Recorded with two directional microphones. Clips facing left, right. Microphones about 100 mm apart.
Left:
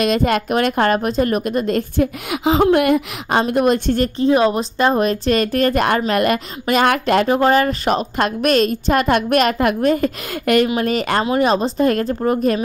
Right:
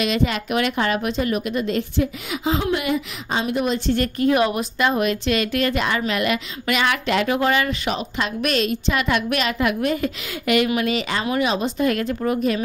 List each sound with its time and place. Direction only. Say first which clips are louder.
0.0 s a woman's voice: left 5 dB; 45° left (ahead or behind)
4.2 s a woman's voice: left 4 dB; 30° left (ahead or behind)